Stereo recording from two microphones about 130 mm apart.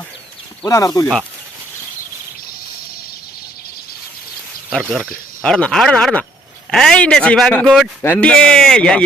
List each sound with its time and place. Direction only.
0.6 s speech: 25° left (ahead or behind)
4.9 s speech: centre (ahead or behind)